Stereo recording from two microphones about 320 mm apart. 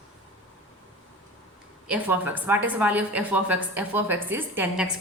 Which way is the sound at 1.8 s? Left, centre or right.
Centre.